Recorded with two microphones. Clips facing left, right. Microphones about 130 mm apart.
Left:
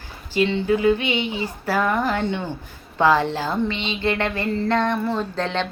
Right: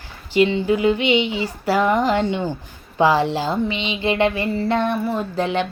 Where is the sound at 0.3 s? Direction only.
15° right (ahead or behind).